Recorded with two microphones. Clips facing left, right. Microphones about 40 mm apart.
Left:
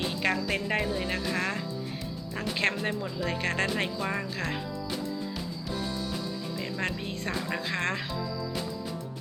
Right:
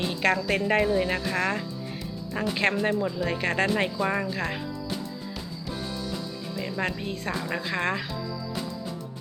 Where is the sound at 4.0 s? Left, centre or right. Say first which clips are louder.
Right 5 dB; right.